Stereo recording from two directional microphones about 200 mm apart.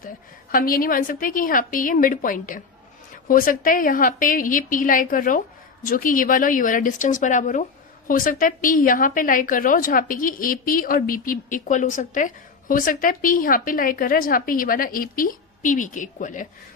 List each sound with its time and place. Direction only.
0.5 s a woman's voice: 45° left (ahead or behind)